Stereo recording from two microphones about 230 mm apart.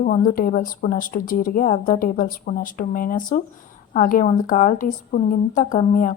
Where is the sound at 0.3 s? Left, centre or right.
Left.